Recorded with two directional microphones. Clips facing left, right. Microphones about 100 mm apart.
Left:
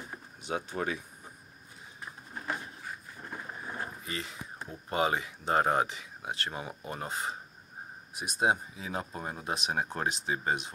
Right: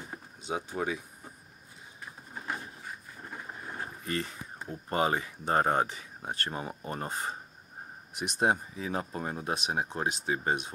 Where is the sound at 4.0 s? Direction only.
45° right (ahead or behind).